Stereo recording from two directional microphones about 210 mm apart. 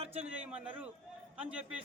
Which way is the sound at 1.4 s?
5° right (ahead or behind).